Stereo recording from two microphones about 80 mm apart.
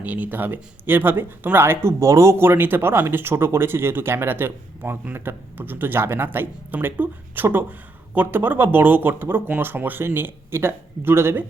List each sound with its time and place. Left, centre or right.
0.0 s speech: centre